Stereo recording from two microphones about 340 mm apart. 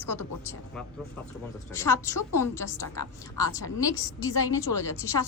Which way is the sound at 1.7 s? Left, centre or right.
Centre.